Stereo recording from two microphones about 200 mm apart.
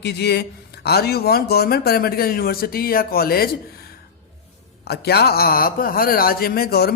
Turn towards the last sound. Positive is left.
turn(degrees=50)  # may be behind; listen again after turning